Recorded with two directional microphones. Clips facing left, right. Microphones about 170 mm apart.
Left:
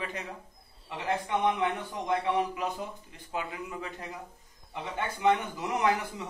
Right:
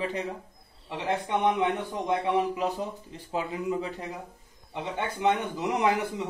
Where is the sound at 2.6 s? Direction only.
30° right (ahead or behind).